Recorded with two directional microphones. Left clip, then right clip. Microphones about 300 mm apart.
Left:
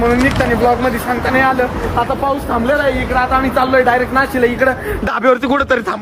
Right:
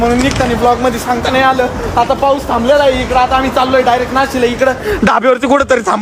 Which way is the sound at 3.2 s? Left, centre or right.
Centre.